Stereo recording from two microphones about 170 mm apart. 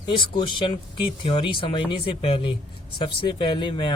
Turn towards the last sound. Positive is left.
turn(degrees=30)  # may be behind; listen again after turning